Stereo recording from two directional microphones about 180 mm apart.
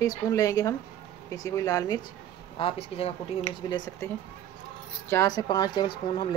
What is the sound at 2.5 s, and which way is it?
Speech, 30° left (ahead or behind).